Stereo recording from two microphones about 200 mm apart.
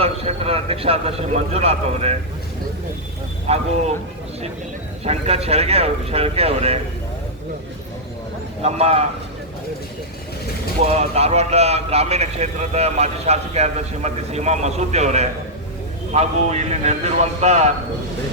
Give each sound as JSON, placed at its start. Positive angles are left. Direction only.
{"t": 0.0, "sound": "a man's voice", "side_deg": -30}
{"t": 3.4, "sound": "a man's voice", "side_deg": -30}
{"t": 5.0, "sound": "a man's voice", "side_deg": -30}
{"t": 8.6, "sound": "a man's voice", "side_deg": -30}
{"t": 10.8, "sound": "a man's voice", "side_deg": -30}